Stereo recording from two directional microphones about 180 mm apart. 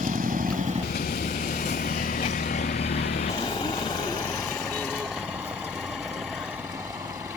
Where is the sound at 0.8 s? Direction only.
55° left (ahead or behind); by 4.3 s 25° left (ahead or behind).